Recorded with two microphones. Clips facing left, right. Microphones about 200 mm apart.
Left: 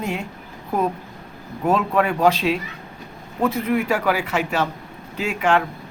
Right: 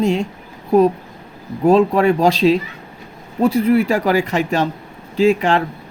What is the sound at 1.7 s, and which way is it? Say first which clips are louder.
Speech: right 7 dB; 30° right (ahead or behind).